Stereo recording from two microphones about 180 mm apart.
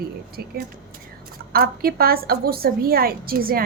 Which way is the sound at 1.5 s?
55° right (ahead or behind).